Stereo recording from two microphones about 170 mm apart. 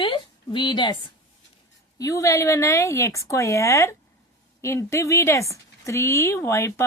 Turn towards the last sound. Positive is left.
turn(degrees=15)  # may be behind; listen again after turning